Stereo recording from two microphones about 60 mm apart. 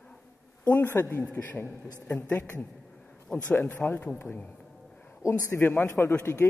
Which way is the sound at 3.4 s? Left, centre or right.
Left.